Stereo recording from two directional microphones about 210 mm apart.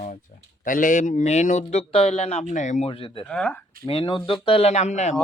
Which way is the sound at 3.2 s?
5° left (ahead or behind).